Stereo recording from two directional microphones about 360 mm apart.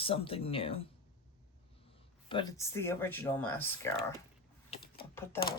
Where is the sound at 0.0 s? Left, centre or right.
Centre.